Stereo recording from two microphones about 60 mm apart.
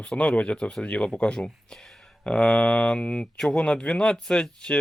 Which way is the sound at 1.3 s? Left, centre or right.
Centre.